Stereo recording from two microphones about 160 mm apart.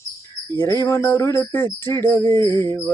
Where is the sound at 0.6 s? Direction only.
15° left (ahead or behind).